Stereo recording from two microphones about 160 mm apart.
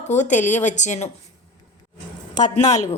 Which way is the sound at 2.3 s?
50° left (ahead or behind).